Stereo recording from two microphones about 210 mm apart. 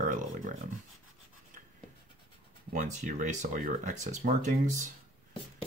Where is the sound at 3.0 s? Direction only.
35° right (ahead or behind).